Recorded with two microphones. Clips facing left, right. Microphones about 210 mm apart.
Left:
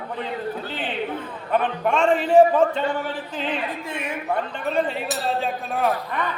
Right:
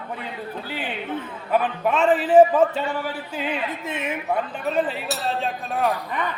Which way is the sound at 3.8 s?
20° right (ahead or behind).